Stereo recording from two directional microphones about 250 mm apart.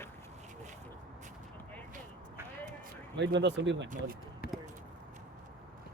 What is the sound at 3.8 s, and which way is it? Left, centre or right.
Speech, right.